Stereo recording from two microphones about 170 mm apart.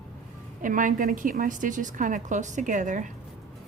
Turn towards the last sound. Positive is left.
turn(degrees=-45)  # may be behind; listen again after turning